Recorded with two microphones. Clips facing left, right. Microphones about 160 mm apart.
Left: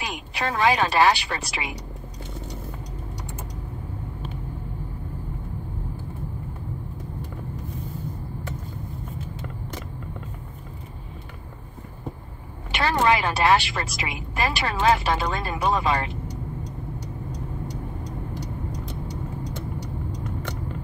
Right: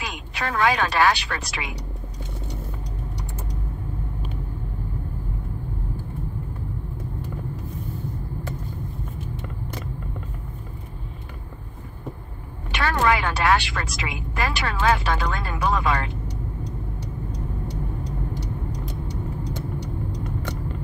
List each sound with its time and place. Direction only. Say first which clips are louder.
0.4 s a woman's voice: left 1 dB; 25° left (ahead or behind)
12.7 s a woman's voice: left 1 dB; 20° left (ahead or behind)